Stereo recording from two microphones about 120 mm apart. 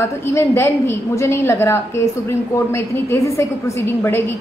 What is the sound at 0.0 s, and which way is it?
A woman's voice, 20° left (ahead or behind).